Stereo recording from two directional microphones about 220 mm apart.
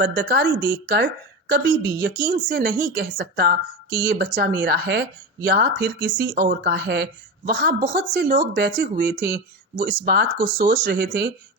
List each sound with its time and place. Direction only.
0.0 s speech: 45° right (ahead or behind)